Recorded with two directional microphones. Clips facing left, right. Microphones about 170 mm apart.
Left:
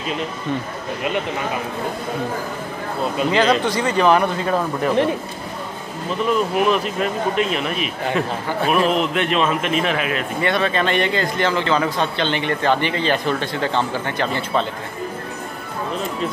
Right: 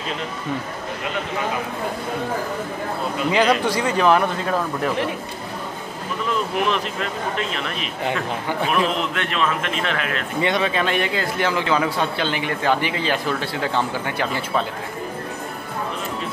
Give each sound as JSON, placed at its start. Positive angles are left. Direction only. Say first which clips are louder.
{"t": 3.3, "sound": "a man's voice", "louder": "even", "side_deg": -10}
{"t": 6.6, "sound": "speech", "louder": "left 4 dB", "side_deg": 5}
{"t": 10.4, "sound": "a man's voice", "louder": "left 1 dB", "side_deg": -15}